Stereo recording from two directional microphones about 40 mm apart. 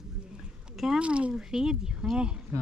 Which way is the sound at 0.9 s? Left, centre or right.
Right.